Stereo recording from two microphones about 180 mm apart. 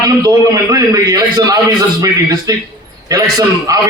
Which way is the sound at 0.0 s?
20° right (ahead or behind).